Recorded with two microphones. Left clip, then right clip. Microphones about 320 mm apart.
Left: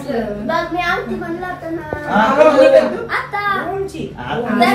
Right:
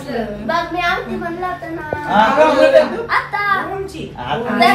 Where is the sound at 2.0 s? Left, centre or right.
Right.